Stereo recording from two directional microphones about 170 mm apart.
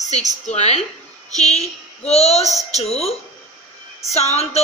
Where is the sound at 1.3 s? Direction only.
40° left (ahead or behind).